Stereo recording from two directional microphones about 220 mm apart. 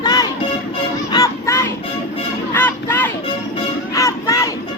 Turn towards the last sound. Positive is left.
turn(degrees=15)  # may be behind; listen again after turning